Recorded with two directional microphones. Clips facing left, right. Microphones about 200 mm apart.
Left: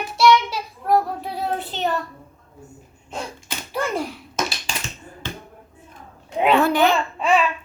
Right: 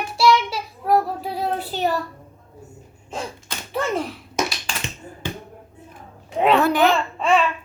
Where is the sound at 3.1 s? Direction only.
Centre (ahead or behind).